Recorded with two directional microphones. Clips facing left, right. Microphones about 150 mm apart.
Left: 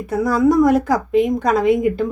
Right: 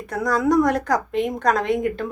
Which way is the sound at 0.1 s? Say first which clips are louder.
Left 4 dB; 5° left (ahead or behind).